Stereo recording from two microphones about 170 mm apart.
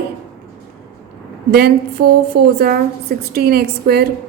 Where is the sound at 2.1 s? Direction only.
65° right (ahead or behind).